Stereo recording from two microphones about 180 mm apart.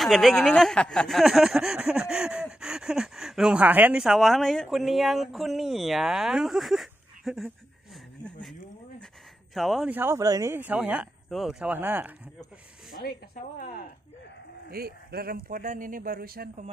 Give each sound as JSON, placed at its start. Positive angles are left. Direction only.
{"t": 0.0, "sound": "speech", "side_deg": 0}
{"t": 8.2, "sound": "a sound", "side_deg": 5}
{"t": 9.5, "sound": "speech", "side_deg": 0}
{"t": 9.9, "sound": "speech", "side_deg": -15}
{"t": 12.9, "sound": "a woman's voice", "side_deg": 55}
{"t": 14.7, "sound": "speech", "side_deg": -60}